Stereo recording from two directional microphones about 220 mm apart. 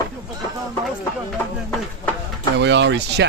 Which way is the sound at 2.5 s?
55° right (ahead or behind).